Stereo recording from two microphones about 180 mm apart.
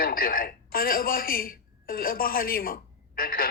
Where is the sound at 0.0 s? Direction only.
55° left (ahead or behind).